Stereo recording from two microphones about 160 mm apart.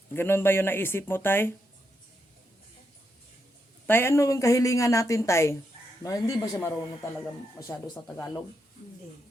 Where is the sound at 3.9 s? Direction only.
15° left (ahead or behind).